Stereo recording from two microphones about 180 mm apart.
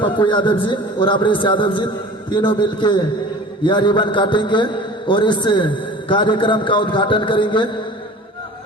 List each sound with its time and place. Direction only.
0.0 s a man's voice: 25° left (ahead or behind)